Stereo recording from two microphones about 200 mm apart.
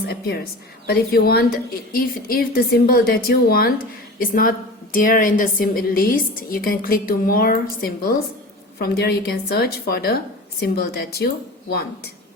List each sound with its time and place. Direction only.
0.1 s a woman's voice: 50° left (ahead or behind)